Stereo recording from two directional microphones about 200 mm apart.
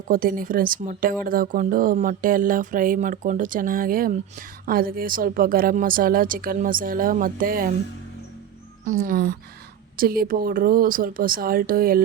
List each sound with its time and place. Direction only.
0.1 s speech: 45° right (ahead or behind)
8.8 s speech: 40° right (ahead or behind)